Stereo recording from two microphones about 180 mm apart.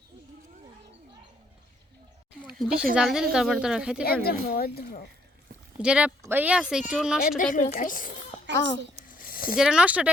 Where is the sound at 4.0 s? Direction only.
60° left (ahead or behind).